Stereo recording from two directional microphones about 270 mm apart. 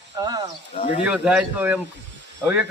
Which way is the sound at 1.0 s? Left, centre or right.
Centre.